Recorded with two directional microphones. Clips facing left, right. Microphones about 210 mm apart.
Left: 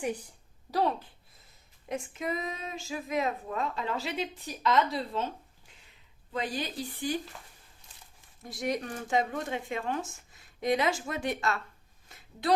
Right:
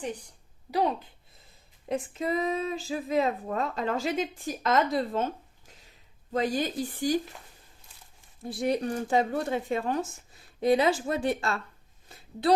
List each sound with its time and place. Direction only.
0.0 s a woman's voice: 10° left (ahead or behind)
0.7 s a woman's voice: 15° right (ahead or behind)
1.9 s speech: 35° right (ahead or behind)
8.4 s speech: 30° right (ahead or behind)
12.0 s a sound: 30° right (ahead or behind)